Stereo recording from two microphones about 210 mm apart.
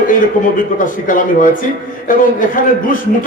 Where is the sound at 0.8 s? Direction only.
40° left (ahead or behind).